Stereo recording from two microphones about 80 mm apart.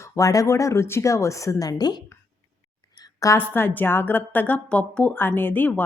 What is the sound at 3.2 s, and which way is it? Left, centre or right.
A woman's voice, left.